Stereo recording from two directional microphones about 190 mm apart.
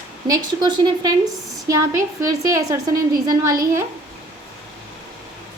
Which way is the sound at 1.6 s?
15° right (ahead or behind).